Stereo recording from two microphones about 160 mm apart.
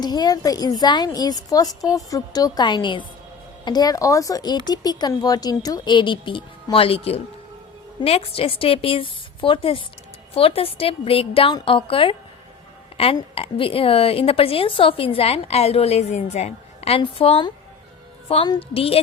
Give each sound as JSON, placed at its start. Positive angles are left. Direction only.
{"t": 0.0, "sound": "a woman's voice", "side_deg": 25}
{"t": 13.1, "sound": "a woman's voice", "side_deg": 35}